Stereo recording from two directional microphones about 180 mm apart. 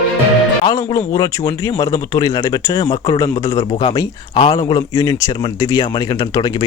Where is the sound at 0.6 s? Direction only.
20° left (ahead or behind).